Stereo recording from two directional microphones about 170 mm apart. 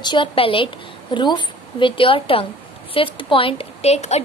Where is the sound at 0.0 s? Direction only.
30° left (ahead or behind).